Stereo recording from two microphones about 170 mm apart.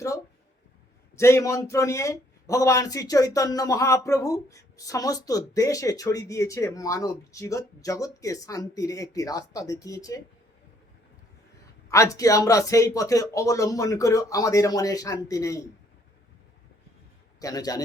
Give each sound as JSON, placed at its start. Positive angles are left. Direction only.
{"t": 1.1, "sound": "a man's voice", "side_deg": 15}
{"t": 11.9, "sound": "a man's voice", "side_deg": 20}
{"t": 17.4, "sound": "a man's voice", "side_deg": 20}